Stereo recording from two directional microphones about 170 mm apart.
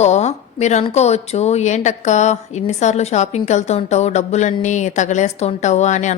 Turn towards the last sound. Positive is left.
turn(degrees=45)  # may be behind; listen again after turning